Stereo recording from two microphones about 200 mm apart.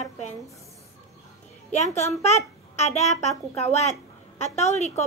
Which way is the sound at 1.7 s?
35° left (ahead or behind).